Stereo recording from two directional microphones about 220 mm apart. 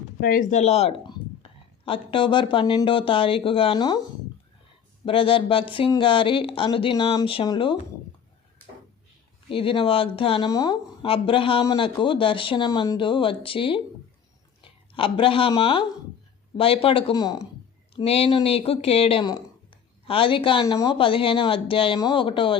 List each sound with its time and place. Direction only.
0.2 s speech: 40° left (ahead or behind); by 4.0 s 20° left (ahead or behind)
5.0 s speech: 25° left (ahead or behind)
9.5 s speech: 25° left (ahead or behind)